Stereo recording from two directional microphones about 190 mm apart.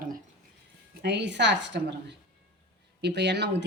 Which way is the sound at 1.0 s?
65° right (ahead or behind).